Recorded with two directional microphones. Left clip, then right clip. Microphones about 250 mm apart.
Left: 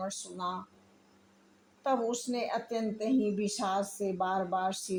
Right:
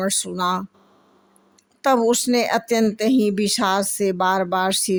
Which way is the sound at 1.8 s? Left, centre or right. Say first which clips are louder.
Right 13 dB; right.